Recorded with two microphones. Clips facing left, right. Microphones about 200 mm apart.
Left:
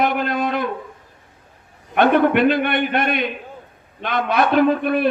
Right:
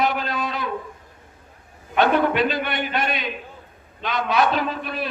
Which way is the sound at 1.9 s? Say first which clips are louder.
Left 4 dB; 55° left (ahead or behind).